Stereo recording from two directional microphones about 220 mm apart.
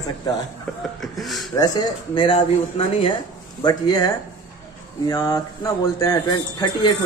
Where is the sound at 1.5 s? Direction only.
15° left (ahead or behind).